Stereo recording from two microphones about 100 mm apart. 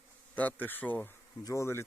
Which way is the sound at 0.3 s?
15° left (ahead or behind).